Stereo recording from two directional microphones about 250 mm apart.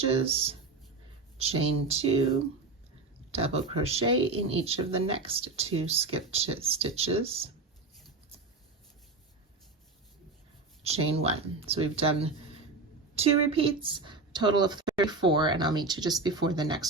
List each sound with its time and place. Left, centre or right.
0.1 s speech: right
3.3 s speech: right
10.8 s speech: right